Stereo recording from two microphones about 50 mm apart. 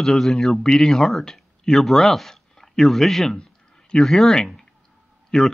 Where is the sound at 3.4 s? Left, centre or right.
Centre.